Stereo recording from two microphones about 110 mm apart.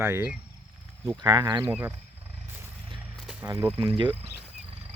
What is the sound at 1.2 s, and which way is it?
Cricket, 40° right (ahead or behind).